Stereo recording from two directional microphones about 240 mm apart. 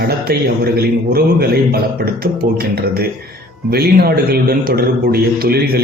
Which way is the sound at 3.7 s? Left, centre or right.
Right.